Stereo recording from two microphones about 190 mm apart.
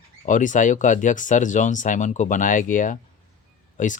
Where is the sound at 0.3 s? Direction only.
40° left (ahead or behind).